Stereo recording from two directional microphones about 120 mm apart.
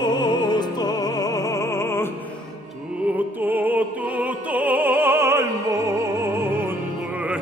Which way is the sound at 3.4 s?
15° right (ahead or behind).